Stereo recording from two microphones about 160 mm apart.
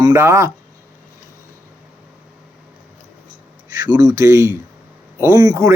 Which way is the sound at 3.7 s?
25° right (ahead or behind).